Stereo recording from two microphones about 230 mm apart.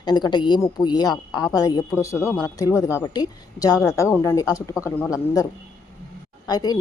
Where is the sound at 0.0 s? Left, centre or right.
Centre.